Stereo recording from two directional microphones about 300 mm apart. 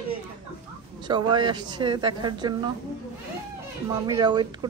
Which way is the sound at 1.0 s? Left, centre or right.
Centre.